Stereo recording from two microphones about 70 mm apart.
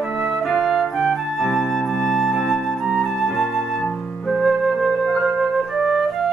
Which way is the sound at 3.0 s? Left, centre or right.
Centre.